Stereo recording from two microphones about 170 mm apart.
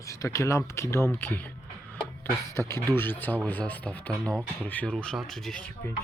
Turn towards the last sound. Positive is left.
turn(degrees=5)  # may be behind; listen again after turning